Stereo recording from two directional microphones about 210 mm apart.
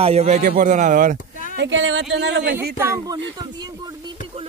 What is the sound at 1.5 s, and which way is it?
Speech, 60° right (ahead or behind).